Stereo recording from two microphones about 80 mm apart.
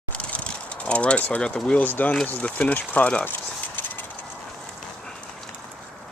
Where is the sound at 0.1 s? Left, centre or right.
Centre.